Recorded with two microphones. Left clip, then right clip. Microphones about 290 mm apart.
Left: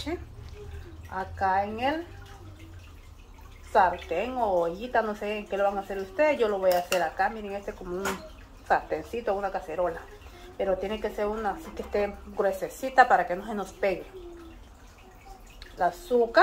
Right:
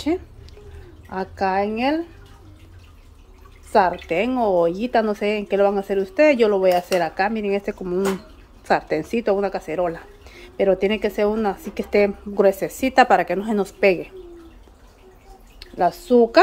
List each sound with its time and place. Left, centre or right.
1.1 s speech: right
3.7 s speech: right
15.6 s speech: right